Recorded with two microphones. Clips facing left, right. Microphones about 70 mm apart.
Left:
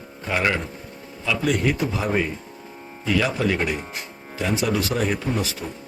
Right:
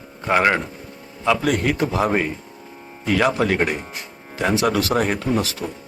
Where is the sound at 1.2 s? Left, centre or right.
Right.